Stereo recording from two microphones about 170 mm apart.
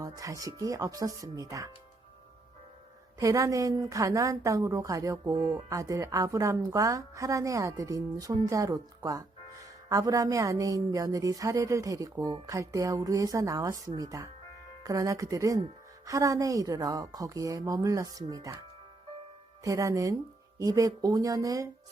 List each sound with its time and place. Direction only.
0.0 s a woman's voice: 20° right (ahead or behind)
3.2 s a woman's voice: 20° right (ahead or behind)
19.6 s a woman's voice: 20° right (ahead or behind)